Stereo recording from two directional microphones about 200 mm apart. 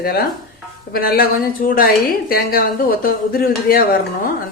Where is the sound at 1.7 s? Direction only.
45° left (ahead or behind).